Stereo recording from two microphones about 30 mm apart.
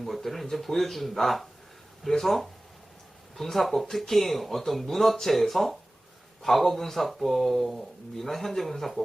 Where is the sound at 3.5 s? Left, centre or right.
Centre.